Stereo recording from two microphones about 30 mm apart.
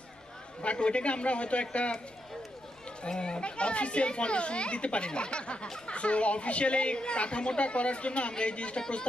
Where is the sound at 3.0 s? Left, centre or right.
Left.